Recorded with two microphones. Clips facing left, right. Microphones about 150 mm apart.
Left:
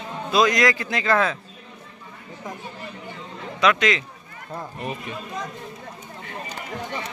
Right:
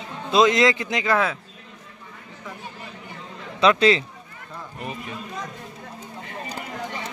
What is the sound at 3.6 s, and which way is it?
Speech, 30° right (ahead or behind).